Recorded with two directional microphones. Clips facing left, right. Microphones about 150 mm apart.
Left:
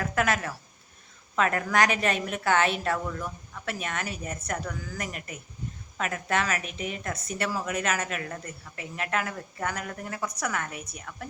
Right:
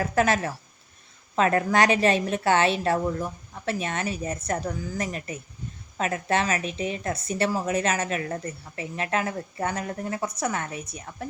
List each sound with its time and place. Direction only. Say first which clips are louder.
0.0 s a woman's voice: right 4 dB; 30° right (ahead or behind)